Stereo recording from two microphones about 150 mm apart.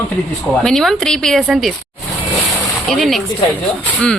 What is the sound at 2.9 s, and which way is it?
A woman's voice, centre (ahead or behind).